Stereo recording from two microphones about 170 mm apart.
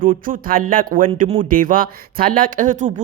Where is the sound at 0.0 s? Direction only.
50° right (ahead or behind).